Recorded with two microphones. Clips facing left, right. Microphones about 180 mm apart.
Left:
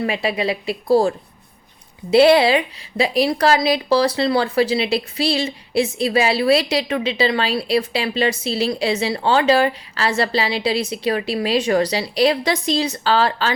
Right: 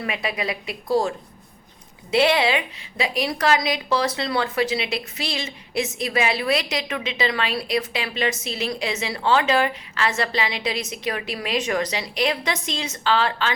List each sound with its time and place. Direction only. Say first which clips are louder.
0.0 s a woman's voice: left 6 dB; 30° left (ahead or behind)